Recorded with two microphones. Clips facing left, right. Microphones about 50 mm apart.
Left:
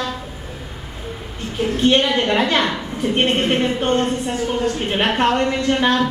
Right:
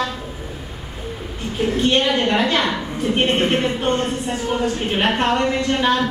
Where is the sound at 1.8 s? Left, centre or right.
Centre.